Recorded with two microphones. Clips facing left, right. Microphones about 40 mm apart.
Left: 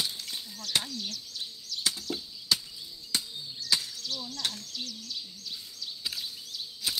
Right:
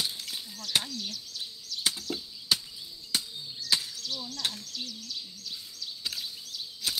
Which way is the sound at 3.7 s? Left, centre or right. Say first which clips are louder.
Even; centre.